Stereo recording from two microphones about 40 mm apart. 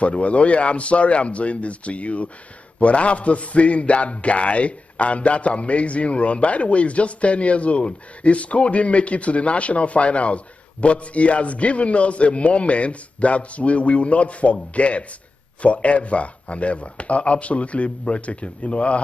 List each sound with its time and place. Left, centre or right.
0.0 s a man's voice: left